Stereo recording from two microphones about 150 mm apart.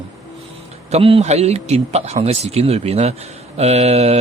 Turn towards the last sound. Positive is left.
turn(degrees=-45)  # may be behind; listen again after turning